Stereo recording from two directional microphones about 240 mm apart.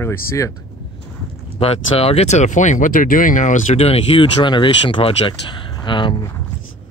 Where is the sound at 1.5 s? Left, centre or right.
Left.